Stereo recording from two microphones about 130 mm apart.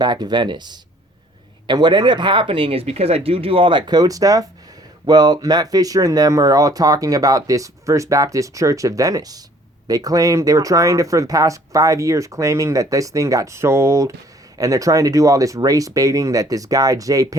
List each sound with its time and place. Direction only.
0.0 s speech: 30° right (ahead or behind)